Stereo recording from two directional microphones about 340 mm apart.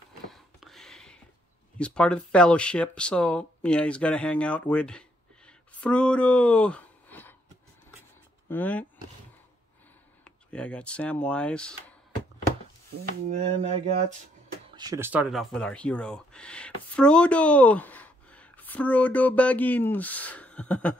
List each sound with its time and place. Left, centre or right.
0.3 s a sound: centre
1.8 s speech: centre
8.5 s speech: centre
10.5 s speech: centre
13.3 s speech: centre
14.8 s speech: centre